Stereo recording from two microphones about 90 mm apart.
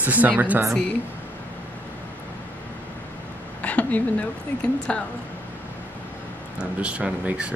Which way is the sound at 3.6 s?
15° left (ahead or behind).